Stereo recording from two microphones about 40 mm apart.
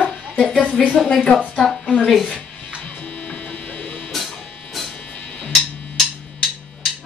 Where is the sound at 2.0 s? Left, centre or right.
Centre.